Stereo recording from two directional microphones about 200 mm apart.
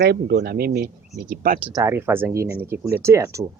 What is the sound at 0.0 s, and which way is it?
Speech, 50° right (ahead or behind).